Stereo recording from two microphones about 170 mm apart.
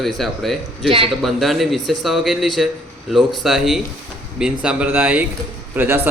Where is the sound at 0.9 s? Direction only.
35° right (ahead or behind).